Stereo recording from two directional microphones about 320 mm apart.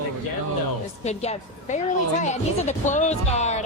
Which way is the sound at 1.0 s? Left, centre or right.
Centre.